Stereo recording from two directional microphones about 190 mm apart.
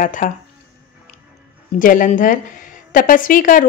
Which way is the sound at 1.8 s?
45° left (ahead or behind).